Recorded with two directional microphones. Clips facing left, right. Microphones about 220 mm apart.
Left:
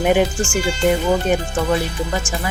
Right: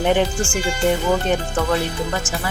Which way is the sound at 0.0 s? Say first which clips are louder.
Left 2 dB; 10° left (ahead or behind).